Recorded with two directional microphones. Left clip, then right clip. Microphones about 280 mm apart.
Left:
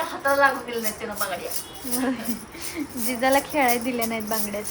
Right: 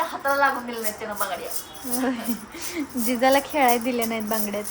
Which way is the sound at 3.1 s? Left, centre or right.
Centre.